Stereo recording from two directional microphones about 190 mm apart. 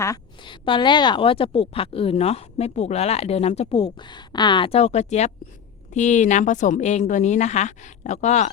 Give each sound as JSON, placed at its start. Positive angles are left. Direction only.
{"t": 0.0, "sound": "a woman's voice", "side_deg": 20}